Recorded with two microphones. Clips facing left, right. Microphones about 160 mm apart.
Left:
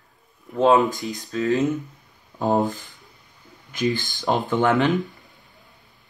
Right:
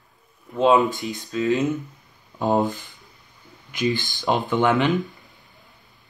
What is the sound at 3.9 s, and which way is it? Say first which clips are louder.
Speech: right 2 dB; 20° right (ahead or behind).